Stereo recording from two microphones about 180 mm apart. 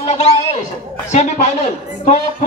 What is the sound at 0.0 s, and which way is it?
Speech, 35° left (ahead or behind).